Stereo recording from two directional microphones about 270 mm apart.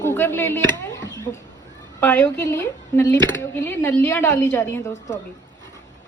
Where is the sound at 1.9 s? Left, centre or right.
Centre.